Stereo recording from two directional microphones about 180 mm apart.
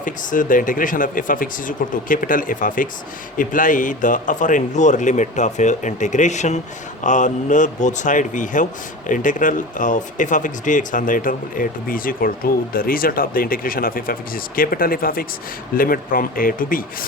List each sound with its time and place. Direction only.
0.0 s speech: 45° left (ahead or behind)